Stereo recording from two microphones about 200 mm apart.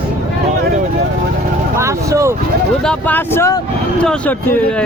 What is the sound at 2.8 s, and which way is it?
Speech, 5° left (ahead or behind).